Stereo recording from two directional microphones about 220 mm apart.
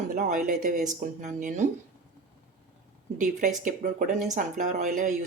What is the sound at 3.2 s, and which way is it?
Speech, 35° right (ahead or behind).